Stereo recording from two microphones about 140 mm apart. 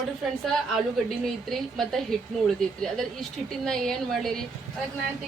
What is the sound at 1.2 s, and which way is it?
A woman's voice, centre (ahead or behind).